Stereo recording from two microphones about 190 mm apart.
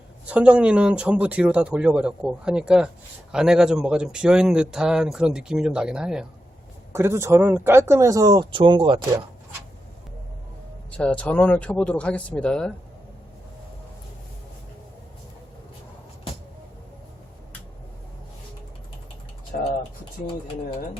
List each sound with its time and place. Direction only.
0.3 s speech: 5° right (ahead or behind)
6.9 s speech: 15° right (ahead or behind)
10.9 s speech: 5° left (ahead or behind)
19.5 s speech: 45° left (ahead or behind)